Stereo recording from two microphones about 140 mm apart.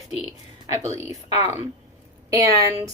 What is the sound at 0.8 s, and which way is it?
A woman's voice, 20° right (ahead or behind).